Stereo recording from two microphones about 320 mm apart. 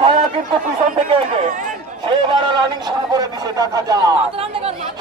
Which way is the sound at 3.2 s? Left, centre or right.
Centre.